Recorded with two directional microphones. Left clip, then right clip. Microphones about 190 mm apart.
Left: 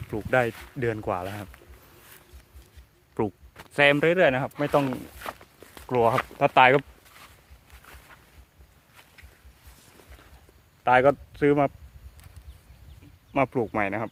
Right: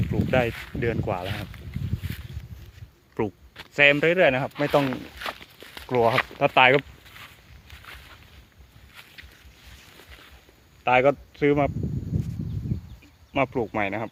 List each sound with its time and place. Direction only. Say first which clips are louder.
0.1 s speech: even; 5° left (ahead or behind)
3.2 s a sound: even; centre (ahead or behind)
3.8 s speech: right 1 dB; 10° left (ahead or behind)
4.5 s speech: right 2 dB; 15° right (ahead or behind); by 6.7 s centre (ahead or behind)
6.7 s a sound: right 1 dB; 15° right (ahead or behind)
10.8 s speech: even; centre (ahead or behind)
13.3 s speech: even; centre (ahead or behind)